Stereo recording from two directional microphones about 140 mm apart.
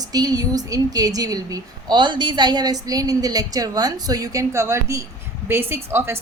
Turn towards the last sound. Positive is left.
turn(degrees=-20)  # may be behind; listen again after turning